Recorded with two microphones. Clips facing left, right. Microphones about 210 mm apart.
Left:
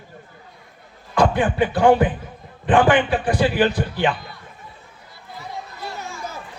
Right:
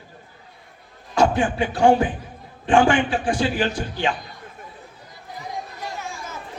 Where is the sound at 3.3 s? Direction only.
55° left (ahead or behind).